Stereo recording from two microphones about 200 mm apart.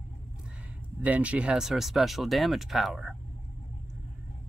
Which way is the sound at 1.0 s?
5° right (ahead or behind).